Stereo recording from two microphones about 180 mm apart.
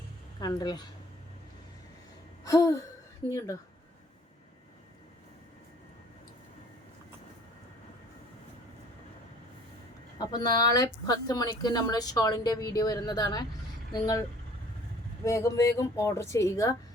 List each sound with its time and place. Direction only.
0.3 s speech: 20° left (ahead or behind)
2.4 s gasp: 20° left (ahead or behind)
3.2 s speech: 15° left (ahead or behind)
10.2 s speech: 20° left (ahead or behind)
15.2 s speech: 15° left (ahead or behind)